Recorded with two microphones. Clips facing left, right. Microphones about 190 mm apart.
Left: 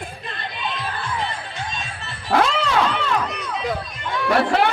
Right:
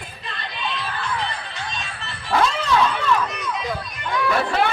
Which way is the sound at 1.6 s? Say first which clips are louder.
Left 1 dB; 45° left (ahead or behind).